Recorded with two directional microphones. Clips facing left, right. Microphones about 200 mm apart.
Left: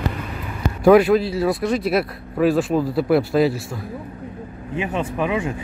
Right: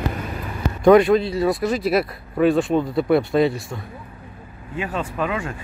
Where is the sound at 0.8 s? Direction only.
5° left (ahead or behind).